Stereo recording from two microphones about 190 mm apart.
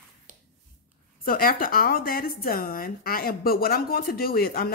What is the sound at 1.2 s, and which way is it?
A woman's voice, 50° left (ahead or behind).